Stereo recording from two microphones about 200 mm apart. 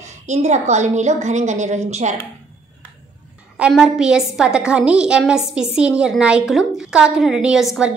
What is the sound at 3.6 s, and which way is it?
A woman's voice, 5° right (ahead or behind).